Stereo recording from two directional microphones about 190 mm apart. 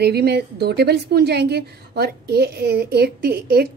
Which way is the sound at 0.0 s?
60° right (ahead or behind).